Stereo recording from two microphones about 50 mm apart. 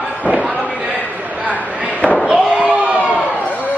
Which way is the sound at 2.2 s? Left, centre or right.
Centre.